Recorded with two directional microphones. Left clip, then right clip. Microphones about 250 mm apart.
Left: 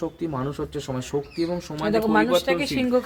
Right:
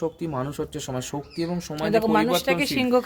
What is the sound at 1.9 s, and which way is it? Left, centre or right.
Speech, right.